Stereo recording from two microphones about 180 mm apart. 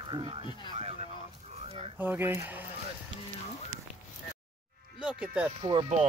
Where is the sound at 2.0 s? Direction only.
10° right (ahead or behind).